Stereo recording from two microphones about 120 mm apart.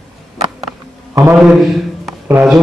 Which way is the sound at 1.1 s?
25° right (ahead or behind).